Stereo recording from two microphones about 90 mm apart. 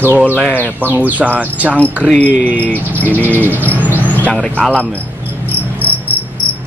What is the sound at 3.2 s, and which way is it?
Bird, 20° left (ahead or behind).